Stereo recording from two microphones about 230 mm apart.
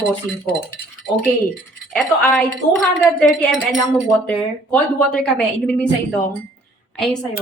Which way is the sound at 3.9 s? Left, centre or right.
Centre.